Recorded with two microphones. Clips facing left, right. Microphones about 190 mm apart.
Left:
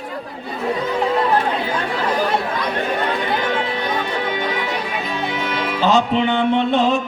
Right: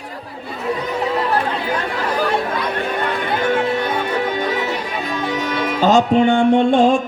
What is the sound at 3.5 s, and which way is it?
Music, 45° right (ahead or behind).